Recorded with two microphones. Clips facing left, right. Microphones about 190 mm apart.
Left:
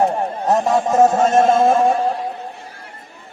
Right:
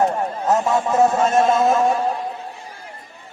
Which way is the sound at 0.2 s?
35° left (ahead or behind).